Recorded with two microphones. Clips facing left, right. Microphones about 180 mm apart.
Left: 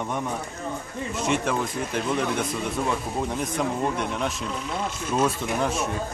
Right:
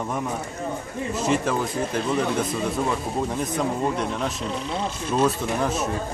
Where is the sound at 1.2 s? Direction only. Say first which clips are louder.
Right 2 dB; centre (ahead or behind).